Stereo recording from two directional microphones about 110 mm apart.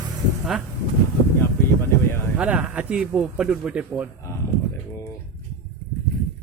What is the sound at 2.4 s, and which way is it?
Speech, 10° right (ahead or behind).